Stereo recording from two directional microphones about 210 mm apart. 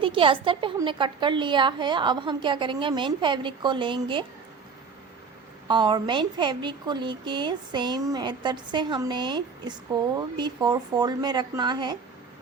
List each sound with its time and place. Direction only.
0.0 s a woman's voice: 25° right (ahead or behind)
5.6 s a woman's voice: 20° right (ahead or behind)